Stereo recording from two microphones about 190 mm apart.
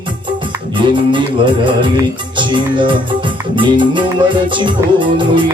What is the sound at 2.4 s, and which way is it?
Music, 25° right (ahead or behind).